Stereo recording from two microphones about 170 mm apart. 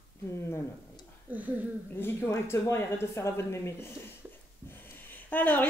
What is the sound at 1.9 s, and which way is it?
A woman's voice, 15° left (ahead or behind).